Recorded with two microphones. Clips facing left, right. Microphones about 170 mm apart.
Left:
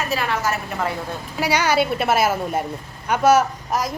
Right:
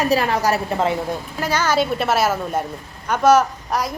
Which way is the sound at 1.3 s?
10° left (ahead or behind).